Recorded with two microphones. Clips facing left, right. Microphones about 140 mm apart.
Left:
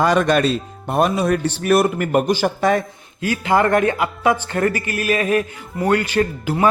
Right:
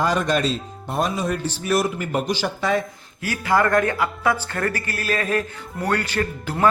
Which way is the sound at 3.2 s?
20° left (ahead or behind).